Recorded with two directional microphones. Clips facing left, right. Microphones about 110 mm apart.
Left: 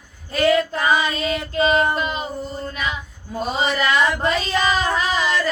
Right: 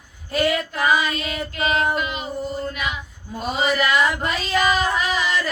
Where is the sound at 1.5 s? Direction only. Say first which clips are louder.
Left 5 dB; 30° left (ahead or behind).